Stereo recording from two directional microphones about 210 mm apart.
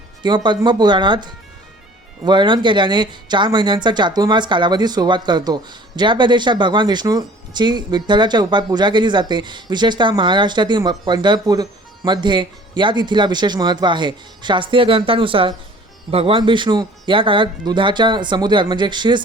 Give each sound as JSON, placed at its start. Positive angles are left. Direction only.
{"t": 0.2, "sound": "speech", "side_deg": -20}